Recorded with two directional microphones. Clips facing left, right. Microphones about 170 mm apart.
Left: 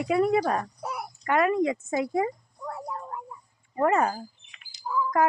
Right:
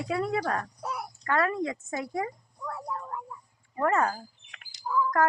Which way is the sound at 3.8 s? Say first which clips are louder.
Left 3 dB; 20° left (ahead or behind).